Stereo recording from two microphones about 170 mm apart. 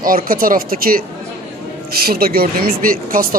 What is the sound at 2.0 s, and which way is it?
A woman's voice, 60° right (ahead or behind).